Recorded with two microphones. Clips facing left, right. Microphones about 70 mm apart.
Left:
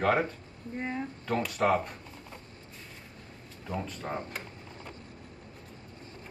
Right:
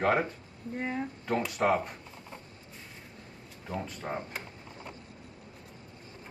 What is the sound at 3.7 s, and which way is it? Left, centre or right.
Speech, centre.